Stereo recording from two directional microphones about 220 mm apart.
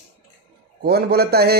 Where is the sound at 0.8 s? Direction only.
45° right (ahead or behind).